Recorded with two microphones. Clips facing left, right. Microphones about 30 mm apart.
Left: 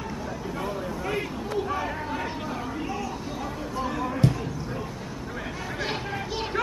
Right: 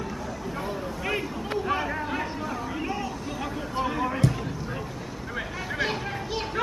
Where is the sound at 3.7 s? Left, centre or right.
Right.